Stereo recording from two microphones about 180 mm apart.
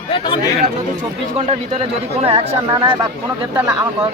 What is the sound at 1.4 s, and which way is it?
Speech, 40° right (ahead or behind).